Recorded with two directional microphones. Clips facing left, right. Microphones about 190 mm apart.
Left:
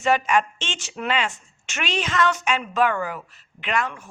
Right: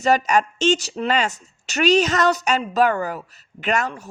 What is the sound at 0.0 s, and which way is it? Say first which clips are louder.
Speech: right 2 dB; 40° right (ahead or behind).